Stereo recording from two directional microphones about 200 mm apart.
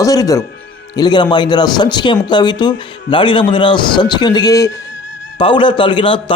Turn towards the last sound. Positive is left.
turn(degrees=25)  # may be behind; listen again after turning